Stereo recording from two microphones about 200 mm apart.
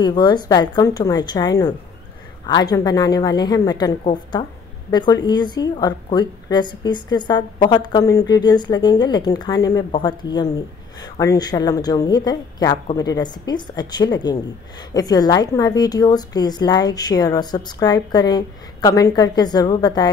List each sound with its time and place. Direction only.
0.0 s a woman's voice: 20° left (ahead or behind)